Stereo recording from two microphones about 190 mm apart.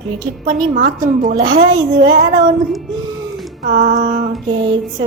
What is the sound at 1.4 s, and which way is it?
Speech, 25° right (ahead or behind).